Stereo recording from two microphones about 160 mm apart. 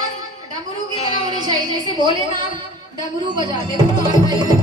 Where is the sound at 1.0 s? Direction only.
35° left (ahead or behind).